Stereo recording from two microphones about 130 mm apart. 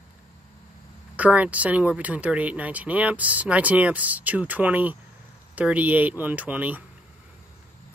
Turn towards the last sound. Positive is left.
turn(degrees=-10)  # may be behind; listen again after turning